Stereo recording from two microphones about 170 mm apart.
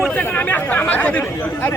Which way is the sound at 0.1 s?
15° left (ahead or behind).